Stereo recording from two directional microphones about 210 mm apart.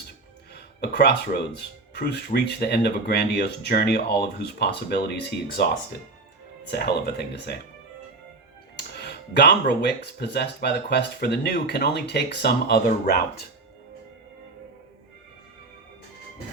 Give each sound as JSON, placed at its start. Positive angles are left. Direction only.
{"t": 0.5, "sound": "music", "side_deg": 50}
{"t": 1.5, "sound": "speech", "side_deg": 50}
{"t": 6.7, "sound": "speech", "side_deg": 50}
{"t": 9.3, "sound": "speech", "side_deg": 55}